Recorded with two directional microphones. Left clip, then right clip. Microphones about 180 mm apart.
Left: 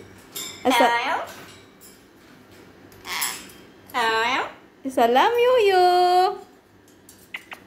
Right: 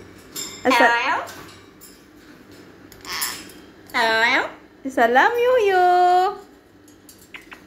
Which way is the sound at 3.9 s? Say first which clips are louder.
Right 4 dB; 20° right (ahead or behind).